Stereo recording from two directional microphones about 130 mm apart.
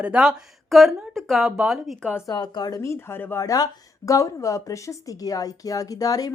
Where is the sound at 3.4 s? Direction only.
25° left (ahead or behind).